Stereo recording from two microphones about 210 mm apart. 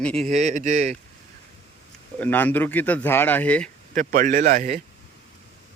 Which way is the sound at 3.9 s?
40° right (ahead or behind).